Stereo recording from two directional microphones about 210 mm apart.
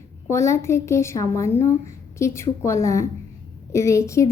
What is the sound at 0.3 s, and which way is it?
A woman's voice, 15° left (ahead or behind).